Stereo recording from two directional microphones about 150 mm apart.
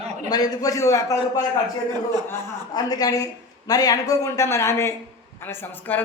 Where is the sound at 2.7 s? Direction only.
25° left (ahead or behind).